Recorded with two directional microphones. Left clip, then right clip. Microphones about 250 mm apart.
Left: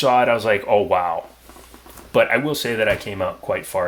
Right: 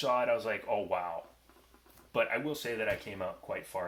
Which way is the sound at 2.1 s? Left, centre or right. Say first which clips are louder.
Left 15 dB; left.